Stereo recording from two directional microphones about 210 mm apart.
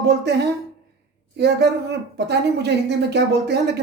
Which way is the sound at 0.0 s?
55° right (ahead or behind).